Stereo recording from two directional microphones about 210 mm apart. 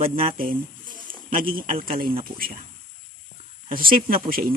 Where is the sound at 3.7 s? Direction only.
45° right (ahead or behind).